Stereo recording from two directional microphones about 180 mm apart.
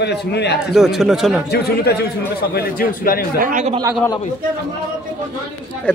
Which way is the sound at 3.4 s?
45° right (ahead or behind).